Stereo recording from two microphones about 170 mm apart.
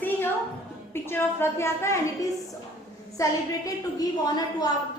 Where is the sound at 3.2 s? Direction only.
20° left (ahead or behind).